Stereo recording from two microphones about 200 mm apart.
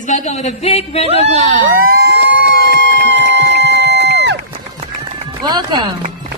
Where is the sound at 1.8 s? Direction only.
50° right (ahead or behind).